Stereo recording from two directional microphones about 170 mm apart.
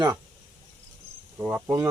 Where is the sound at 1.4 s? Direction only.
10° right (ahead or behind).